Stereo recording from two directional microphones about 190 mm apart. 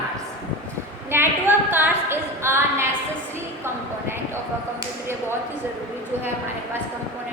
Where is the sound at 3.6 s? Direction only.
10° right (ahead or behind).